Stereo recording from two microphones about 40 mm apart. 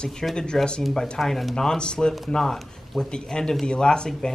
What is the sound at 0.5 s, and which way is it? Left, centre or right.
Speech, centre.